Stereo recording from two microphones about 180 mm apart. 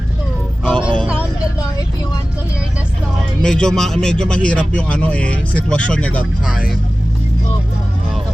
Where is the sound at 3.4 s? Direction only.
5° left (ahead or behind).